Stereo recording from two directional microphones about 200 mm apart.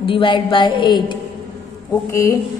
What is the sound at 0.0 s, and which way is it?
A woman's voice, 25° left (ahead or behind).